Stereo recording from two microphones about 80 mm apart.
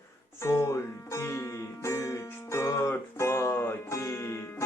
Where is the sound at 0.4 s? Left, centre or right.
Left.